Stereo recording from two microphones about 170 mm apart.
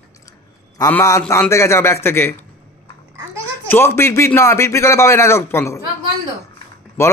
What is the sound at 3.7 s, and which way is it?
Speech, 15° left (ahead or behind).